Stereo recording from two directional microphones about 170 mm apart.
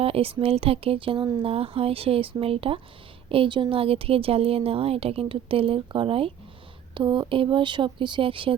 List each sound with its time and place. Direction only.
0.0 s speech: 35° right (ahead or behind)